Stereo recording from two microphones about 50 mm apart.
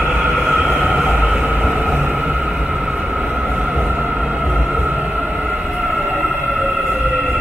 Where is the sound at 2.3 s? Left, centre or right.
Centre.